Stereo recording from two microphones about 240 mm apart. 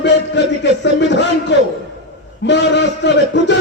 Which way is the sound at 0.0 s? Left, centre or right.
Left.